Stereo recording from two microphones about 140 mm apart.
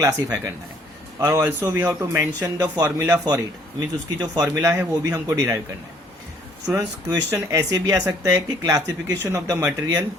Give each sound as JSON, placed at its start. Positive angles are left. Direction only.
{"t": 0.0, "sound": "a man's voice", "side_deg": -25}
{"t": 6.7, "sound": "a man's voice", "side_deg": -25}